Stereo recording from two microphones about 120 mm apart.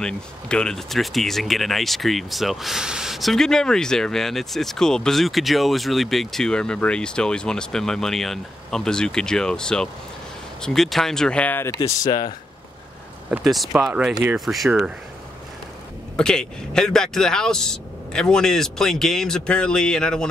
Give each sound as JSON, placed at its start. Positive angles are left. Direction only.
{"t": 0.0, "sound": "speech", "side_deg": 5}
{"t": 13.4, "sound": "speech", "side_deg": 0}
{"t": 16.2, "sound": "speech", "side_deg": 5}